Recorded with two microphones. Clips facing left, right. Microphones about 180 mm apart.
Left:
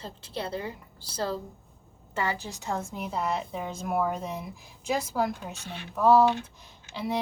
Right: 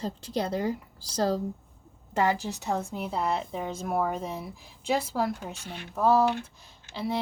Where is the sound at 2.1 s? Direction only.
40° right (ahead or behind).